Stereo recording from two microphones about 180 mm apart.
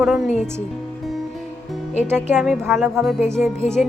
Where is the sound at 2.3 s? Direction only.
5° right (ahead or behind).